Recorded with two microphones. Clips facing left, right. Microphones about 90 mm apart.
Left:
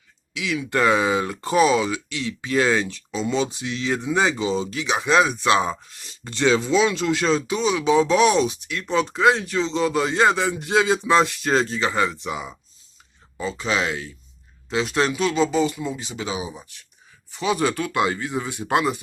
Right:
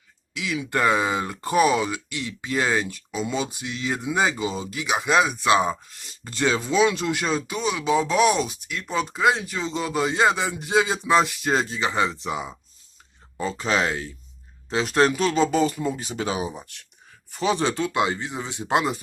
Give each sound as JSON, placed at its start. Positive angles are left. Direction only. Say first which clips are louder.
{"t": 0.3, "sound": "speech", "louder": "left 2 dB", "side_deg": -15}
{"t": 12.2, "sound": "speech", "louder": "even", "side_deg": -30}
{"t": 13.4, "sound": "speech", "louder": "right 1 dB", "side_deg": -40}
{"t": 17.6, "sound": "speech", "louder": "left 1 dB", "side_deg": -25}